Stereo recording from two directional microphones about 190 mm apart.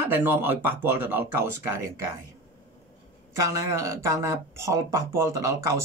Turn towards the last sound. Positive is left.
turn(degrees=-15)  # may be behind; listen again after turning